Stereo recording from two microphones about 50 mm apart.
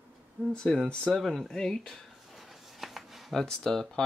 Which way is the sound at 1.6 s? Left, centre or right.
Centre.